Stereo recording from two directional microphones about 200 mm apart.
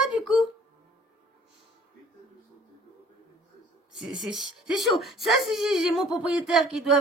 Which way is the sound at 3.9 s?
Centre (ahead or behind).